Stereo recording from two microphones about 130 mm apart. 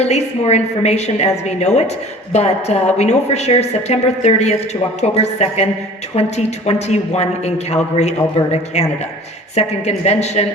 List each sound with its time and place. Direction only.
0.0 s a woman's voice: 55° left (ahead or behind)
9.6 s a woman's voice: 55° left (ahead or behind)